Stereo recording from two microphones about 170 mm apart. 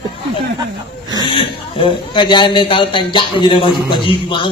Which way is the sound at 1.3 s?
30° left (ahead or behind).